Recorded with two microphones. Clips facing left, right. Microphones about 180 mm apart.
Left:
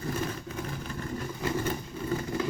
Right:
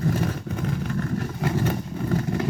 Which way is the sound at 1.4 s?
65° right (ahead or behind).